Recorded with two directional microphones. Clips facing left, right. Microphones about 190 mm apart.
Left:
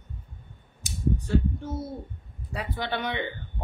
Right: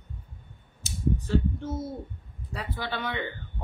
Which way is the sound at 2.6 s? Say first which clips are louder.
Left 3 dB; 20° left (ahead or behind).